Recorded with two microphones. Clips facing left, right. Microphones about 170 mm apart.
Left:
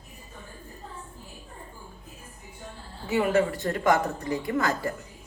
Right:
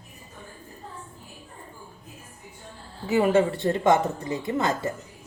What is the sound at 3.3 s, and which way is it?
Speech, 25° right (ahead or behind).